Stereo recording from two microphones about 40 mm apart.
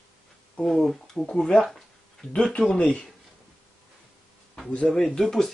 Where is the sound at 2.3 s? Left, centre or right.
Left.